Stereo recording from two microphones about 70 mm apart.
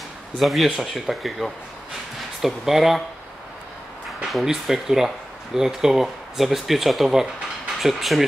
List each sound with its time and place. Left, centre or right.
0.4 s speech: centre
4.2 s speech: centre